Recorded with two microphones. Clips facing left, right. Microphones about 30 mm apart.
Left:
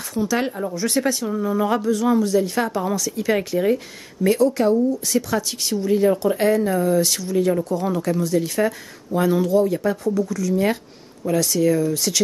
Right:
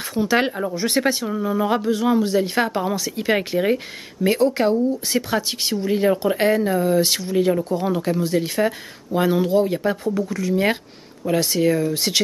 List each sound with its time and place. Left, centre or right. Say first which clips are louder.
0.1 s speech: right 3 dB; right